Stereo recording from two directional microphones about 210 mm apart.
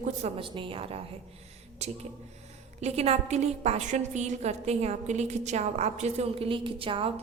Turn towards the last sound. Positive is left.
turn(degrees=-25)  # may be behind; listen again after turning